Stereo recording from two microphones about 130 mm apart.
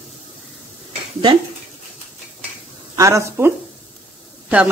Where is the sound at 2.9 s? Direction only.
25° right (ahead or behind).